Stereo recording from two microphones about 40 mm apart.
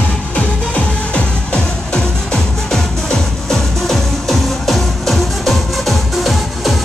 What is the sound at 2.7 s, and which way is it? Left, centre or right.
Music, centre.